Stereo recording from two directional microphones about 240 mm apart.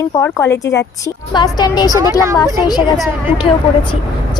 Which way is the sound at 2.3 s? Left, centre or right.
Centre.